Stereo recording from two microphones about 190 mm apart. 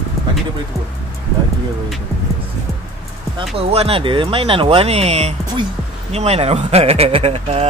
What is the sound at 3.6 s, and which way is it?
Speech, 30° right (ahead or behind).